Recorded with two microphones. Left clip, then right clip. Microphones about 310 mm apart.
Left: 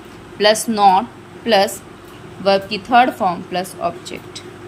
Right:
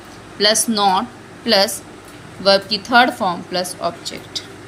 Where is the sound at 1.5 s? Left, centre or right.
Centre.